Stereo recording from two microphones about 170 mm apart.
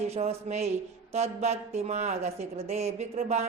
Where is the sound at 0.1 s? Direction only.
35° right (ahead or behind).